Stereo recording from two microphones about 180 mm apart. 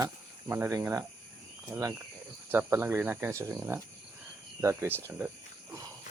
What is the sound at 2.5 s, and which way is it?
Speech, 10° right (ahead or behind).